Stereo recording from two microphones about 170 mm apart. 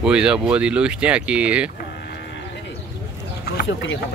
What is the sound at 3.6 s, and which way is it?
Speech, 90° left.